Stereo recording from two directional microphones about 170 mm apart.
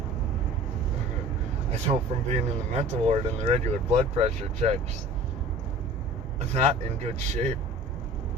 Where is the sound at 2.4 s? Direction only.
40° right (ahead or behind).